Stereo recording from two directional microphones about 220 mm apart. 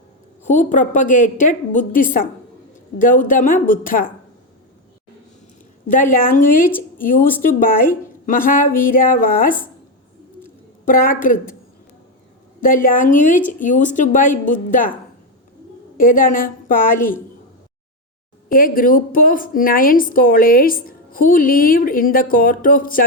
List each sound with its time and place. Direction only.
0.4 s a woman's voice: 35° left (ahead or behind)
5.9 s a woman's voice: 40° left (ahead or behind)
10.8 s a woman's voice: 40° left (ahead or behind)
12.6 s a woman's voice: 40° left (ahead or behind)
16.0 s a woman's voice: 40° left (ahead or behind)
18.4 s a woman's voice: 40° left (ahead or behind)